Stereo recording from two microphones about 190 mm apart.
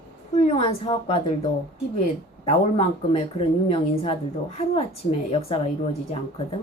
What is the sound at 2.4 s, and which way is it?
A woman's voice, 30° left (ahead or behind).